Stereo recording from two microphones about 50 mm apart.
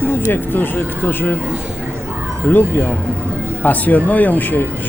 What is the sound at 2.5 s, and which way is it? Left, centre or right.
Speech, left.